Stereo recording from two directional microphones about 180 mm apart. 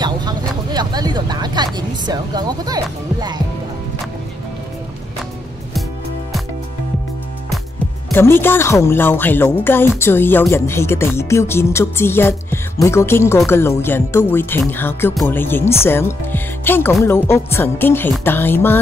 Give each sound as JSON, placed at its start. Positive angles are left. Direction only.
{"t": 0.0, "sound": "vehicle", "side_deg": -25}
{"t": 8.1, "sound": "speech", "side_deg": 10}